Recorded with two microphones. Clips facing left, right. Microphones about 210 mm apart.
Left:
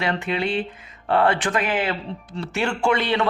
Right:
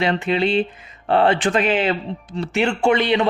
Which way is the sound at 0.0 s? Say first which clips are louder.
Right 5 dB; 25° right (ahead or behind).